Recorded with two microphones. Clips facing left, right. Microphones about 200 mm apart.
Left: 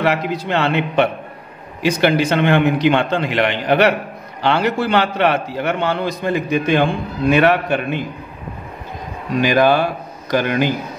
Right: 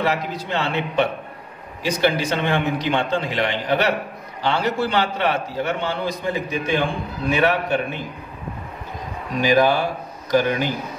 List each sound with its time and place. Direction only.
0.0 s a man's voice: 70° left (ahead or behind)
9.4 s a man's voice: 70° left (ahead or behind)